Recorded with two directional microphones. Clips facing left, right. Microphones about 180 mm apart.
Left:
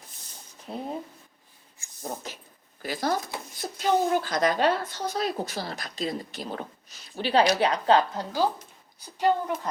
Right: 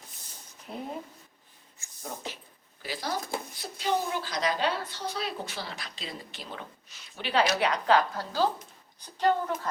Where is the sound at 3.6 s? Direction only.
50° left (ahead or behind).